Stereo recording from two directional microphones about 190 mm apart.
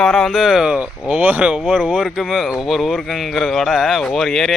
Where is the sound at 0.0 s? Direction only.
Centre (ahead or behind).